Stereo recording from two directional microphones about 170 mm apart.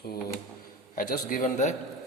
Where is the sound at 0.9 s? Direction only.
55° left (ahead or behind).